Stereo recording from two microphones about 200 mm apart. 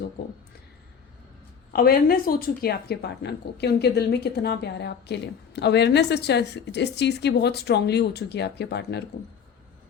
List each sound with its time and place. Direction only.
0.2 s speech: 55° left (ahead or behind)
1.7 s a woman's voice: 50° left (ahead or behind)